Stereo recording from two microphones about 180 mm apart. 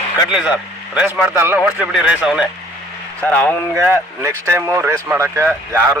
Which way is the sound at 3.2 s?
10° left (ahead or behind).